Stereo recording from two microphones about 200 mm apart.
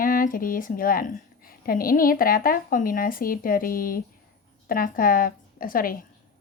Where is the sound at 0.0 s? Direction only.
45° left (ahead or behind).